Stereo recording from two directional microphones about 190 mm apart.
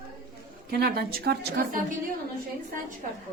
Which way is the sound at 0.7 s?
55° right (ahead or behind).